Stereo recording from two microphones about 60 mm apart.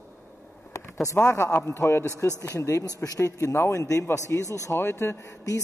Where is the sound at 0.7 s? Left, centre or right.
Left.